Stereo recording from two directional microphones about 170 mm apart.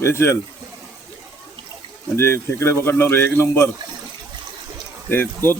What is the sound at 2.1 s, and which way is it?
Speech, 15° left (ahead or behind).